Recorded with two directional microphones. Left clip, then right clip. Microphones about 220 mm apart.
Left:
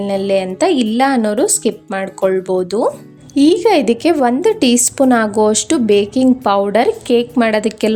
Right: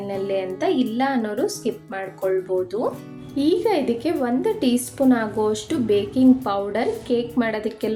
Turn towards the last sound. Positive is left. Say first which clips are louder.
# left 9 dB
turn(degrees=45)  # may be behind; listen again after turning